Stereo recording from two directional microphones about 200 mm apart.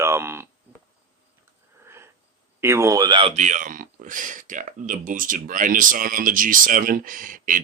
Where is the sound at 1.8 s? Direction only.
10° right (ahead or behind).